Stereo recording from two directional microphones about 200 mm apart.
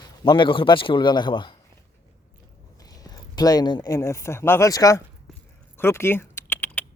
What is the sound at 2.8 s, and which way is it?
Speech, 20° left (ahead or behind).